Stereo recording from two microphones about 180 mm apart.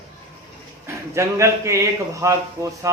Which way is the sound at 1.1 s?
15° right (ahead or behind).